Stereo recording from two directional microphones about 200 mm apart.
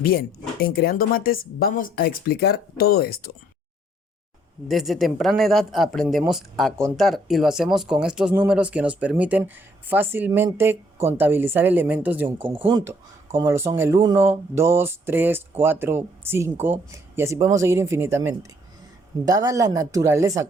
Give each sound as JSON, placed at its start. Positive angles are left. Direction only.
{"t": 0.0, "sound": "speech", "side_deg": 50}
{"t": 4.7, "sound": "speech", "side_deg": 0}
{"t": 12.5, "sound": "speech", "side_deg": -25}
{"t": 12.8, "sound": "speech", "side_deg": -15}